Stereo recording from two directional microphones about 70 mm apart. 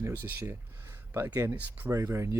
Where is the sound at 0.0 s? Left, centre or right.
Right.